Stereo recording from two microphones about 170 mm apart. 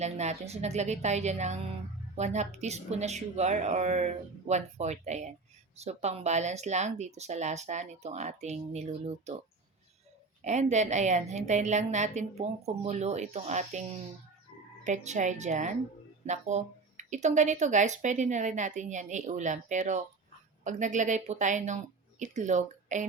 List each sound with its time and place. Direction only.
0.0 s speech: 40° right (ahead or behind)
10.4 s speech: 45° right (ahead or behind)
14.8 s a woman's voice: 45° right (ahead or behind)